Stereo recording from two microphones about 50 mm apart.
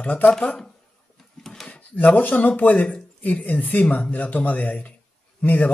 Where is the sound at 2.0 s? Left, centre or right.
Left.